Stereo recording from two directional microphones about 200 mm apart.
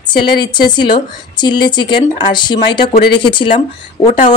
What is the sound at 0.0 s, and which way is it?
Speech, 25° left (ahead or behind).